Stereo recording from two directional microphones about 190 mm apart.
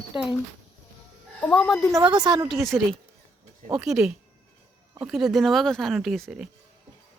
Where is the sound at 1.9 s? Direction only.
20° right (ahead or behind).